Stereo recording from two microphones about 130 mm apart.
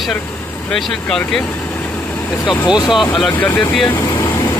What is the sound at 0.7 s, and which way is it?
Speech, 5° left (ahead or behind).